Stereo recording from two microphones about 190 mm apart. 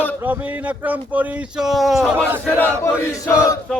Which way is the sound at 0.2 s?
10° right (ahead or behind).